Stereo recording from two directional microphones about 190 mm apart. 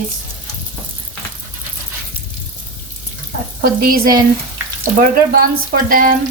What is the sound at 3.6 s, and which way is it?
Speech, 50° right (ahead or behind).